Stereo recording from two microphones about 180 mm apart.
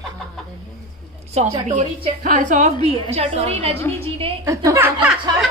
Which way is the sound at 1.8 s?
45° right (ahead or behind).